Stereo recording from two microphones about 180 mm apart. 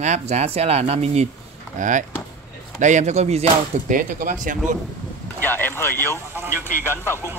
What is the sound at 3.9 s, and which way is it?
Speech, 50° right (ahead or behind).